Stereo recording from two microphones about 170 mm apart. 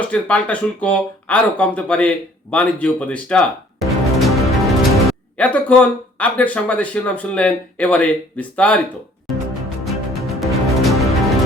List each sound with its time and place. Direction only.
0.0 s speech: 10° left (ahead or behind)
9.8 s music: centre (ahead or behind)